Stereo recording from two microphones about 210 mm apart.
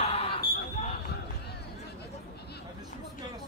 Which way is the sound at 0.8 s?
30° left (ahead or behind).